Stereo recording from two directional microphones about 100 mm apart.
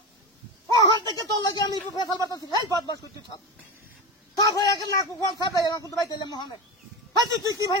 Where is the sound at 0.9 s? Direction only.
40° left (ahead or behind).